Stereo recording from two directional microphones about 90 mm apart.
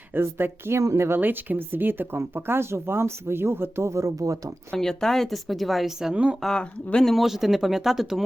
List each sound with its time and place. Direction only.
0.1 s a woman's voice: 25° right (ahead or behind)
4.7 s speech: 5° left (ahead or behind)
6.4 s speech: 5° left (ahead or behind)